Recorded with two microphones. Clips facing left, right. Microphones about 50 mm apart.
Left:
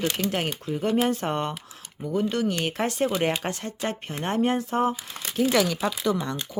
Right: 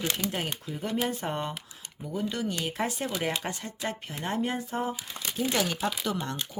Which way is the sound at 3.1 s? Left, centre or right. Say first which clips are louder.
Left 5 dB; left.